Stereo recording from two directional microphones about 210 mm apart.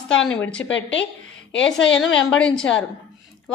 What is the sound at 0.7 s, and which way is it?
Speech, 60° left (ahead or behind).